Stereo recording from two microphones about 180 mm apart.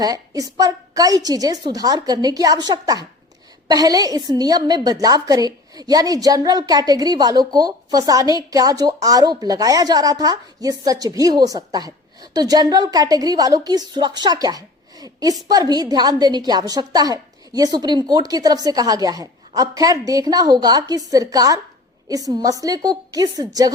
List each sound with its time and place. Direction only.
0.0 s a woman's voice: 20° right (ahead or behind)